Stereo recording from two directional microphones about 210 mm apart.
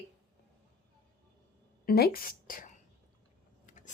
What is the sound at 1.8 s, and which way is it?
A woman's voice, 45° left (ahead or behind).